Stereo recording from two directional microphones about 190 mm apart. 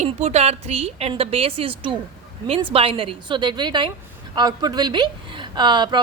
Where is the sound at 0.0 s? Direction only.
35° right (ahead or behind).